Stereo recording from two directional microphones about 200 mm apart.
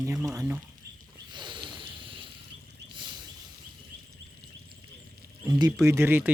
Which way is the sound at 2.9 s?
25° right (ahead or behind).